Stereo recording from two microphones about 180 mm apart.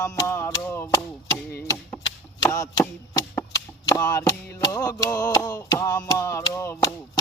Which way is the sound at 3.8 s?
15° left (ahead or behind).